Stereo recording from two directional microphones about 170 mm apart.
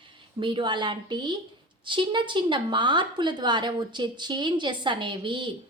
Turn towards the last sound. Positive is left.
turn(degrees=-30)  # may be behind; listen again after turning